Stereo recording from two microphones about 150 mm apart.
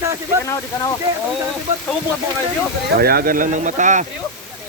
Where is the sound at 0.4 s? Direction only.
25° left (ahead or behind).